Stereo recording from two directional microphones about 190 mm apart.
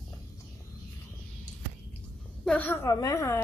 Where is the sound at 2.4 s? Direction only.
5° left (ahead or behind).